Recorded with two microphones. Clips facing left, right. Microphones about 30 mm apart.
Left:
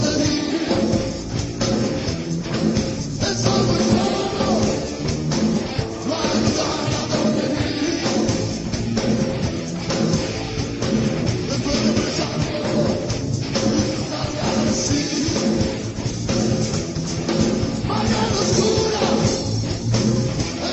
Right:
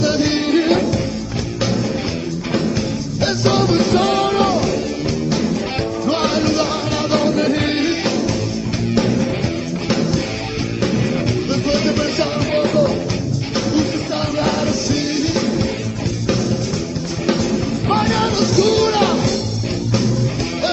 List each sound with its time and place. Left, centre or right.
0.5 s music: right
3.2 s music: right
6.0 s music: right
11.8 s music: right
17.8 s music: right
18.2 s music: right
18.7 s music: right